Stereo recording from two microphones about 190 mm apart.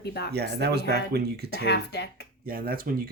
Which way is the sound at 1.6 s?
65° left (ahead or behind).